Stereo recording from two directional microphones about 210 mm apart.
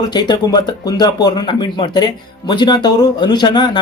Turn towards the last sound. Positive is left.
turn(degrees=20)  # may be behind; listen again after turning